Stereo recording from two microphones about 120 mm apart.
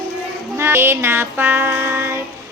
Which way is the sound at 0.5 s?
20° right (ahead or behind).